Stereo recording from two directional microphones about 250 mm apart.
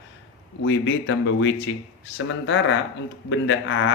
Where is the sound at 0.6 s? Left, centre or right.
Left.